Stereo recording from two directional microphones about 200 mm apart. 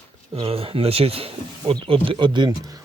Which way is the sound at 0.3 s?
30° right (ahead or behind).